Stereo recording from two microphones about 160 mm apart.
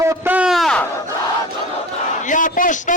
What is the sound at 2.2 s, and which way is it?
Speech, 55° left (ahead or behind).